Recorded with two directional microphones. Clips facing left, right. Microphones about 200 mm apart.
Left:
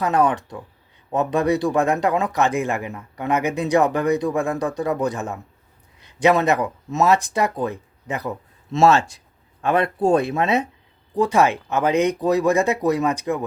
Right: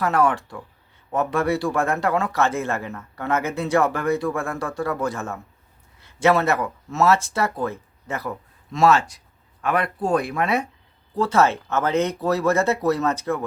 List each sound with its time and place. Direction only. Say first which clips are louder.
0.0 s speech: left 1 dB; 20° left (ahead or behind)